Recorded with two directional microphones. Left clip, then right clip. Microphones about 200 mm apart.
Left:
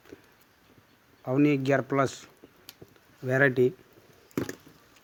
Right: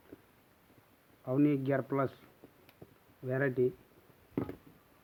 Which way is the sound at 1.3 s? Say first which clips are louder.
Left 6 dB; 25° left (ahead or behind).